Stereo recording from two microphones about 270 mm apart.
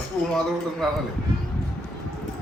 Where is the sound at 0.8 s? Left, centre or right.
Centre.